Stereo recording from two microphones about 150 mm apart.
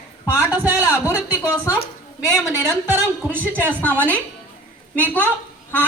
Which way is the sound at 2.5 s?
15° right (ahead or behind).